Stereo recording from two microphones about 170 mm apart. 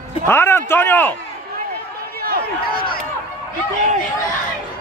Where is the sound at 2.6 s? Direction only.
65° left (ahead or behind).